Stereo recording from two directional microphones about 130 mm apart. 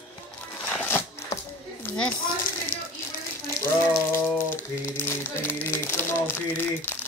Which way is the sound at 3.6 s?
20° left (ahead or behind).